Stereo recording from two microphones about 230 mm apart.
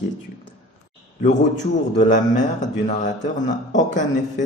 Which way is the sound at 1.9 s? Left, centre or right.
Left.